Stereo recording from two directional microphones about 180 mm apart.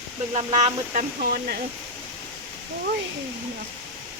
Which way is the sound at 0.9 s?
55° right (ahead or behind).